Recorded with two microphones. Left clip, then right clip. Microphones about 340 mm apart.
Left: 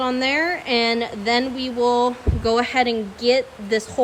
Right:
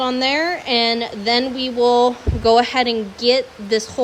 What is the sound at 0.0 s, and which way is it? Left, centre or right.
A woman's voice, centre.